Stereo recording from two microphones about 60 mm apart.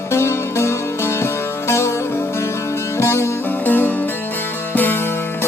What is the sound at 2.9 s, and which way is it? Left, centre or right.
Music, left.